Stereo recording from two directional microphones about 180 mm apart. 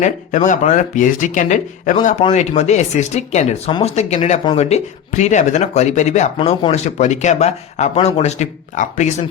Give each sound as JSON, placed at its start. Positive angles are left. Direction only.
{"t": 0.0, "sound": "speech", "side_deg": 45}